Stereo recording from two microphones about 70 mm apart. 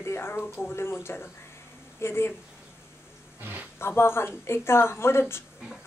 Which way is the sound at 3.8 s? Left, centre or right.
Left.